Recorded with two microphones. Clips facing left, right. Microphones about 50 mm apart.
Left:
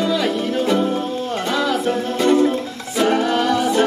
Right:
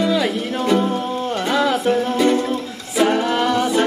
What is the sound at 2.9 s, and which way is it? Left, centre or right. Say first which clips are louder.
Music: even; centre.